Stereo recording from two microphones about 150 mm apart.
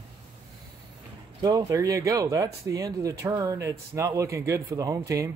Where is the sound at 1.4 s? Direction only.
25° right (ahead or behind).